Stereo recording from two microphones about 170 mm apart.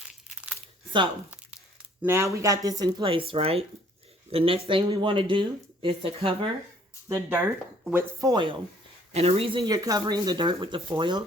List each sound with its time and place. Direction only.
0.0 s crumpling: 5° right (ahead or behind)
2.0 s speech: 15° right (ahead or behind); by 6.5 s 30° right (ahead or behind)
7.1 s speech: 10° right (ahead or behind)
8.2 s speech: 25° right (ahead or behind)